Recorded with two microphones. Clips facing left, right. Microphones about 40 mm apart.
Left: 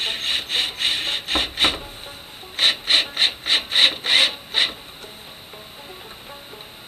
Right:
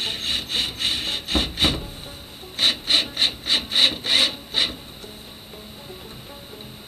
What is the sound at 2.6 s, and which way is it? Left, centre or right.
Rub, left.